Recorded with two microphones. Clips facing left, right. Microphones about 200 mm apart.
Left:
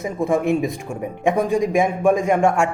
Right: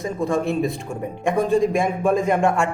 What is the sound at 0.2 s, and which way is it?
A man's voice, 20° left (ahead or behind).